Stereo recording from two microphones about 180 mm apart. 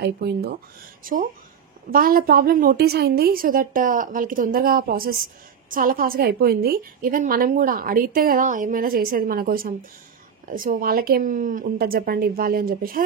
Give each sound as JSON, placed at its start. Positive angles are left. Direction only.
{"t": 0.0, "sound": "speech", "side_deg": -65}
{"t": 1.0, "sound": "a woman's voice", "side_deg": -50}